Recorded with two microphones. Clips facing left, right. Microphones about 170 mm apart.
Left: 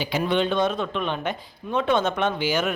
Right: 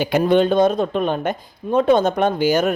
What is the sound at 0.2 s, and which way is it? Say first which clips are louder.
A man's voice: right 7 dB; 45° right (ahead or behind).